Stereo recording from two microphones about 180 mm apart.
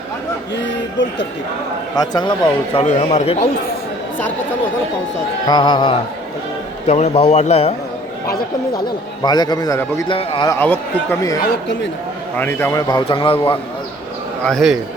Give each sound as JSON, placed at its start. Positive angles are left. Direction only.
{"t": 2.0, "sound": "a man's voice", "side_deg": 20}
{"t": 2.7, "sound": "a man's voice", "side_deg": 35}
{"t": 5.5, "sound": "a man's voice", "side_deg": 25}
{"t": 9.2, "sound": "a man's voice", "side_deg": 25}
{"t": 10.5, "sound": "speech", "side_deg": 10}
{"t": 12.4, "sound": "a man's voice", "side_deg": 10}
{"t": 14.4, "sound": "a man's voice", "side_deg": 0}